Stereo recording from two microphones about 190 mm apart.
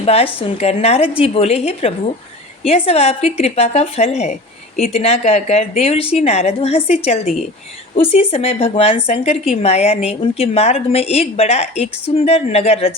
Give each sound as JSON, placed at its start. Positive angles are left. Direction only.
{"t": 0.0, "sound": "a woman's voice", "side_deg": 30}